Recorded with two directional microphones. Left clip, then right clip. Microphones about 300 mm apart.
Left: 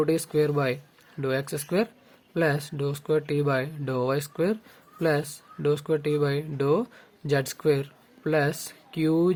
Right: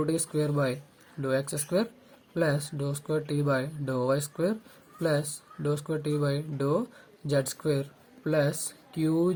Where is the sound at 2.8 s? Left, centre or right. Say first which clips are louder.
Left 5 dB; left.